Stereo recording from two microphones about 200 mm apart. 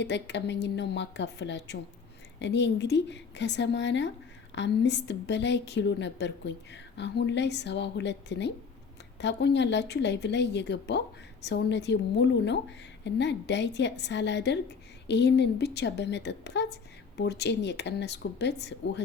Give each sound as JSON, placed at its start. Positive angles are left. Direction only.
{"t": 0.0, "sound": "a woman's voice", "side_deg": 60}